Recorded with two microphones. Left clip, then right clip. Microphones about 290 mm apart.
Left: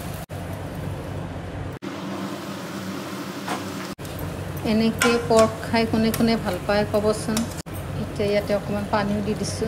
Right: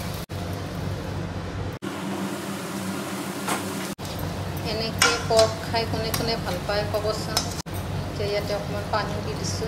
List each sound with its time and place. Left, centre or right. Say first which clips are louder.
4.6 s stir: left 2 dB; left
8.2 s stir: left 5 dB; left